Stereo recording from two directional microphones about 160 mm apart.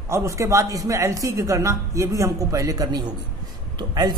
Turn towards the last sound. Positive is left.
turn(degrees=-25)  # may be behind; listen again after turning